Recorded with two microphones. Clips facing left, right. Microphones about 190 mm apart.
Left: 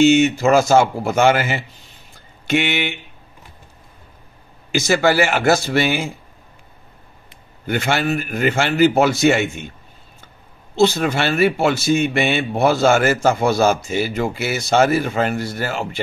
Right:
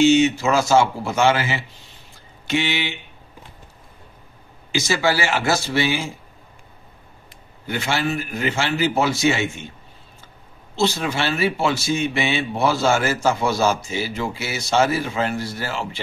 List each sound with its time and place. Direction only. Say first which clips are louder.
0.0 s speech: left 2 dB; 55° left (ahead or behind)
4.7 s speech: left 5 dB; 55° left (ahead or behind)
7.6 s speech: left 4 dB; 55° left (ahead or behind)
10.8 s speech: left 5 dB; 55° left (ahead or behind)